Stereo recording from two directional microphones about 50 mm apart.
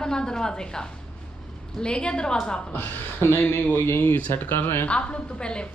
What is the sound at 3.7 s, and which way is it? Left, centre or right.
Speech, left.